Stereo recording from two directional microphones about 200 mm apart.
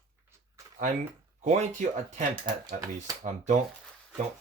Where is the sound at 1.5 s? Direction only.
35° right (ahead or behind).